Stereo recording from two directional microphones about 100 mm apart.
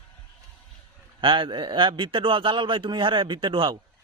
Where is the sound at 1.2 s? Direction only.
55° right (ahead or behind).